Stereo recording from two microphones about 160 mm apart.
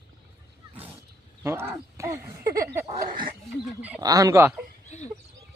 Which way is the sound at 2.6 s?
15° right (ahead or behind).